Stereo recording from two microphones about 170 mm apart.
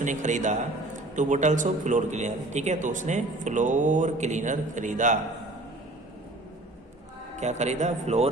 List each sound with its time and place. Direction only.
0.0 s a man's voice: 45° right (ahead or behind)
7.3 s a man's voice: 40° right (ahead or behind)